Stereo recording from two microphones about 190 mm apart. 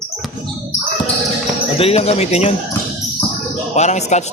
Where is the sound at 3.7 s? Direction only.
40° left (ahead or behind).